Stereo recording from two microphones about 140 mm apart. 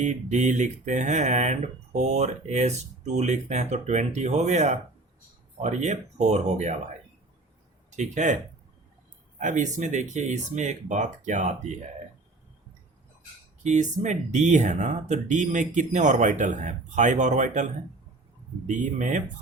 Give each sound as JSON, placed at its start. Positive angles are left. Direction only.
{"t": 0.0, "sound": "speech", "side_deg": -60}
{"t": 7.9, "sound": "speech", "side_deg": -60}
{"t": 9.4, "sound": "speech", "side_deg": -65}
{"t": 13.7, "sound": "speech", "side_deg": -60}
{"t": 18.7, "sound": "speech", "side_deg": -60}